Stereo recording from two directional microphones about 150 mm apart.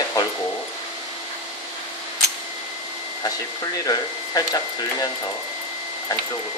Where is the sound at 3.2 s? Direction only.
25° left (ahead or behind).